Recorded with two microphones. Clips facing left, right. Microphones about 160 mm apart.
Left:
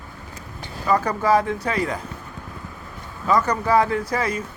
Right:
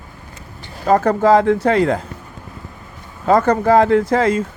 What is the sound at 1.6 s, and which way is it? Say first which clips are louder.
Speech: right 9 dB; 75° right (ahead or behind).